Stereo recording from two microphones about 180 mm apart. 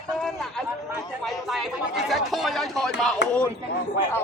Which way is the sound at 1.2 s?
Centre (ahead or behind).